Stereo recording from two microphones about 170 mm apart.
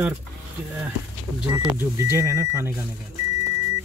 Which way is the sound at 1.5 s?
15° right (ahead or behind).